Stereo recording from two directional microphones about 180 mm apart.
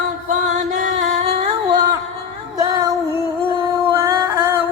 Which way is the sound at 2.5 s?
20° right (ahead or behind).